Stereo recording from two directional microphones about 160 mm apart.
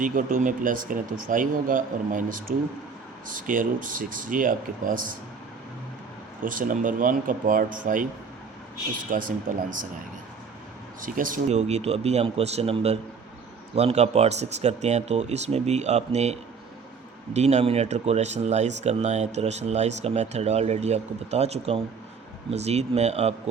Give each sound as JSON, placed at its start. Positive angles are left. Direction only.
{"t": 0.0, "sound": "speech", "side_deg": -55}
{"t": 6.4, "sound": "speech", "side_deg": -60}
{"t": 9.0, "sound": "speech", "side_deg": -55}
{"t": 11.0, "sound": "speech", "side_deg": -60}